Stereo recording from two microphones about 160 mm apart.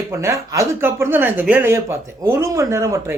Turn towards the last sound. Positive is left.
turn(degrees=-20)  # may be behind; listen again after turning